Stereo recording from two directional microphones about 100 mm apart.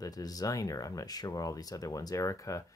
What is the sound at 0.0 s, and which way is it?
Speech, 40° left (ahead or behind).